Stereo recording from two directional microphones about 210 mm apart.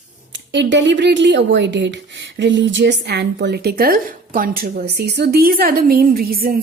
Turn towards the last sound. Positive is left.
turn(degrees=-45)  # may be behind; listen again after turning